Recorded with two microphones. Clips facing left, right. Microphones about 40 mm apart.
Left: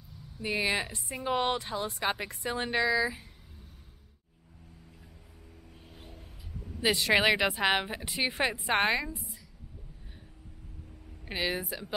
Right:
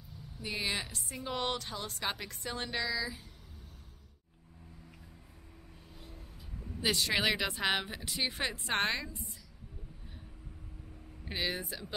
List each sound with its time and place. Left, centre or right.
0.4 s a woman's voice: centre
6.8 s speech: centre
11.2 s speech: centre